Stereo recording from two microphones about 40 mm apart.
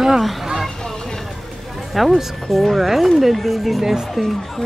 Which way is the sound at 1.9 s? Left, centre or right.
Centre.